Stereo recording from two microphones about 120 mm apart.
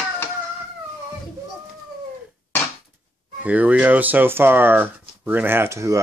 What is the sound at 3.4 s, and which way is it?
Speech, 10° right (ahead or behind).